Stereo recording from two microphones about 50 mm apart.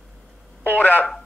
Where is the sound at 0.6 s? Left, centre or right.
Left.